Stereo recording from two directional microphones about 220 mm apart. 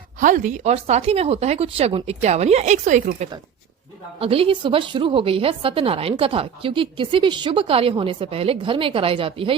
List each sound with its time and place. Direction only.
0.2 s a woman's voice: 35° right (ahead or behind)